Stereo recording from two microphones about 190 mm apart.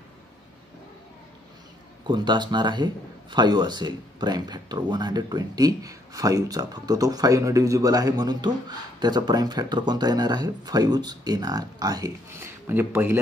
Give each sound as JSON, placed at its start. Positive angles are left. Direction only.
{"t": 2.0, "sound": "a man's voice", "side_deg": -25}